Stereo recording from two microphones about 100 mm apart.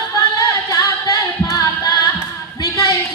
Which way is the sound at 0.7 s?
40° left (ahead or behind).